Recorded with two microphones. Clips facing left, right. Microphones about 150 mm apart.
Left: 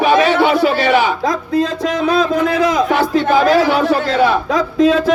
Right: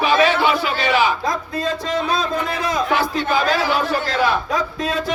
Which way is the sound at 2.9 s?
60° left (ahead or behind).